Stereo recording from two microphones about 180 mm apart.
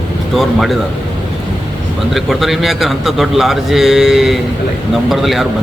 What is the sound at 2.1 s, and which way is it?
A man's voice, centre (ahead or behind).